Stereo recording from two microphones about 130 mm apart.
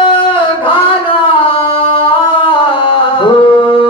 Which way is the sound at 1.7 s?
40° left (ahead or behind).